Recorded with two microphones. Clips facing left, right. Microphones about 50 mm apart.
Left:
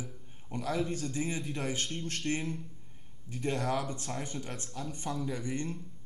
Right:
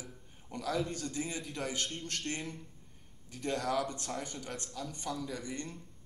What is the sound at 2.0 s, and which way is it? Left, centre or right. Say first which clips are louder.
Speech: left 5 dB; left.